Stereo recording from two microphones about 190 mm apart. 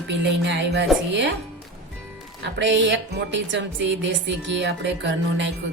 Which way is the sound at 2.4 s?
70° right (ahead or behind).